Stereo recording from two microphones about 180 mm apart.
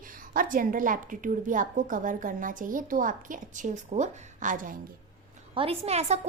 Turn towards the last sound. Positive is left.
turn(degrees=-35)  # may be behind; listen again after turning